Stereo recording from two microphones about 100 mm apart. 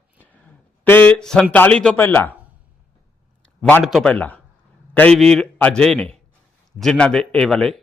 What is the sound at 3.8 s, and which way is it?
Speech, centre (ahead or behind).